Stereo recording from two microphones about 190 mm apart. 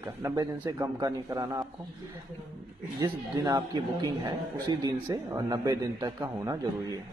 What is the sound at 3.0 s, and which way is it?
A man's voice, 20° right (ahead or behind).